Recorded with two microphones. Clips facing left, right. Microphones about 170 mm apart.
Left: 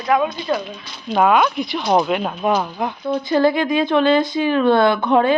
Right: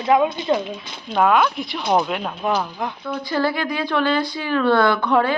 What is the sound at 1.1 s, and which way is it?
A woman's voice, 5° left (ahead or behind).